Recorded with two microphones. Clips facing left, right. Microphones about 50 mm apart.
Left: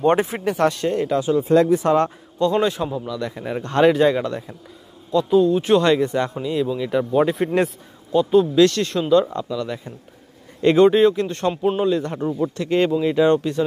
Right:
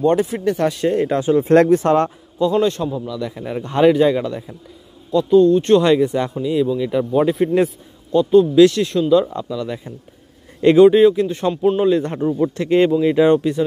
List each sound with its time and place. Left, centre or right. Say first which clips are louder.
0.0 s speech: right 1 dB; left
0.5 s a man's voice: even; centre
0.7 s speech: right 4 dB; centre
1.0 s a man's voice: right 2 dB; right
1.4 s speech: right 4 dB; right
1.8 s a man's voice: right 2 dB; right
2.3 s a man's voice: right 2 dB; centre
8.6 s speech: right 4 dB; centre
11.8 s a man's voice: right 4 dB; right